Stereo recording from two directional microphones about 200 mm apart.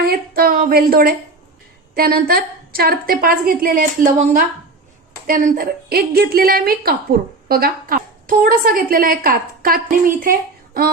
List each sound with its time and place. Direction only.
0.0 s a woman's voice: 50° right (ahead or behind)